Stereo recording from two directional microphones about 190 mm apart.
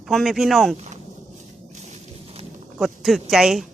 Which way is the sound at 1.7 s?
35° right (ahead or behind).